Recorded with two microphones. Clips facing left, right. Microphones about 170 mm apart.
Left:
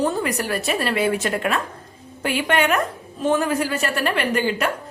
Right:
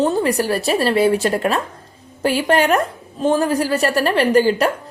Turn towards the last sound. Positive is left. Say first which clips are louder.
# right 7 dB
turn(degrees=-35)  # may be behind; listen again after turning